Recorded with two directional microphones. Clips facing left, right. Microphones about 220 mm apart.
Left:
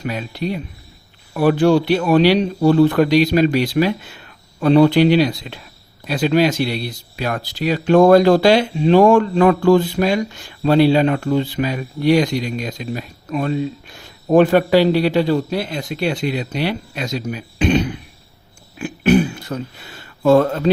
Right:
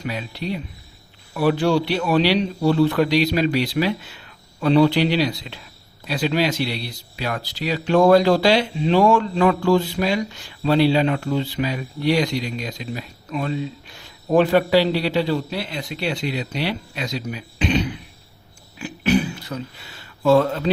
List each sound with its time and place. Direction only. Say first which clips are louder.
0.0 s speech: left 4 dB; 50° left (ahead or behind)